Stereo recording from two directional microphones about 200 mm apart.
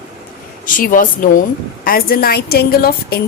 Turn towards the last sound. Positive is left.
turn(degrees=50)  # may be behind; listen again after turning